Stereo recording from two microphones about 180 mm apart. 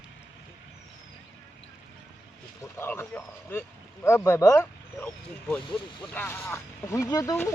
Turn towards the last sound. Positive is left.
turn(degrees=20)  # may be behind; listen again after turning